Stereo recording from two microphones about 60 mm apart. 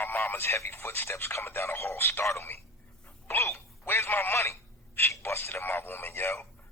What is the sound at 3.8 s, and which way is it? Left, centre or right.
Speech, left.